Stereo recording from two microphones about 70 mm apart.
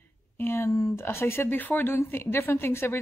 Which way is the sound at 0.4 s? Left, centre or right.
Left.